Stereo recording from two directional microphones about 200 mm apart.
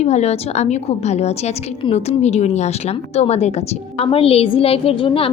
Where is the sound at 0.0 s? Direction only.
35° left (ahead or behind).